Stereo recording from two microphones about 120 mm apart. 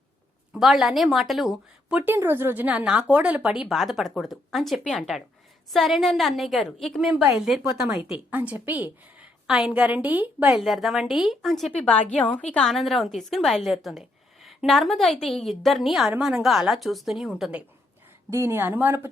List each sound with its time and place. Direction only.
0.5 s a woman's voice: 5° right (ahead or behind)
2.0 s a woman's voice: 20° right (ahead or behind)
10.6 s a woman's voice: centre (ahead or behind)
18.3 s speech: 20° right (ahead or behind)